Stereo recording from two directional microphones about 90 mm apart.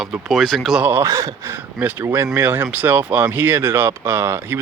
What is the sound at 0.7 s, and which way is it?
Speech, 15° right (ahead or behind).